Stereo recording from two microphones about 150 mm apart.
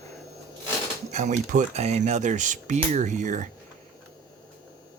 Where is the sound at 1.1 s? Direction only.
50° right (ahead or behind).